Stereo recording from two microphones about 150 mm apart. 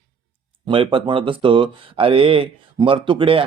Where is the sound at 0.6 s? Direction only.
35° right (ahead or behind).